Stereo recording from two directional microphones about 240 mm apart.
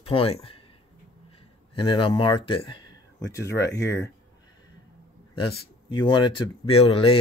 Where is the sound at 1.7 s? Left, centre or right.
Centre.